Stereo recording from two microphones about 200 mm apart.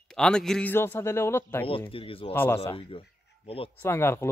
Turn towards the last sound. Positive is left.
turn(degrees=15)  # may be behind; listen again after turning